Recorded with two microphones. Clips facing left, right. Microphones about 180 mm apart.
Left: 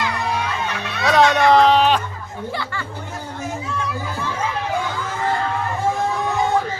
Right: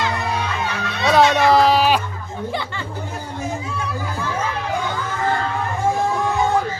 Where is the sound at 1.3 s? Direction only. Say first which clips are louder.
Left 1 dB; 5° right (ahead or behind).